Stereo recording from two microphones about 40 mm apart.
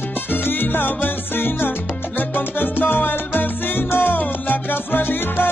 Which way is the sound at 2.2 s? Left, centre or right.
Left.